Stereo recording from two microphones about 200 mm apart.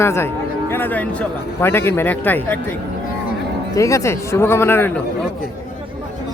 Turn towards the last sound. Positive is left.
turn(degrees=10)  # may be behind; listen again after turning